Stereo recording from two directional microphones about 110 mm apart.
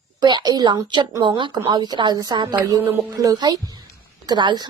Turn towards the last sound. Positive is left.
turn(degrees=-40)  # may be behind; listen again after turning